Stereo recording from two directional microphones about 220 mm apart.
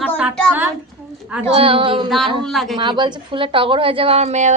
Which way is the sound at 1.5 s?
25° right (ahead or behind).